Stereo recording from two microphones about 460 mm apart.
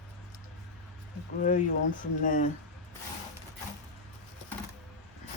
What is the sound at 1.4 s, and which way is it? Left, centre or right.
Speech, centre.